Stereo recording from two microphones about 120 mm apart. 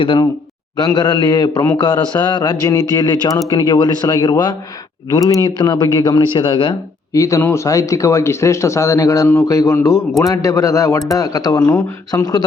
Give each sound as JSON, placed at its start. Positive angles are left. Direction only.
{"t": 0.9, "sound": "a man's voice", "side_deg": 35}
{"t": 7.1, "sound": "speech", "side_deg": 25}